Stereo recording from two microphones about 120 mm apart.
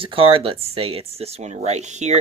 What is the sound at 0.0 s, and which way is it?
Speech, 50° right (ahead or behind).